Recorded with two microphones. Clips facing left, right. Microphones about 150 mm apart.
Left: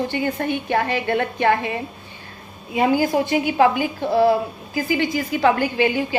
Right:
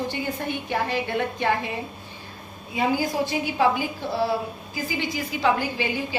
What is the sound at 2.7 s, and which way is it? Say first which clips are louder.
A woman's voice: left 6 dB; 55° left (ahead or behind).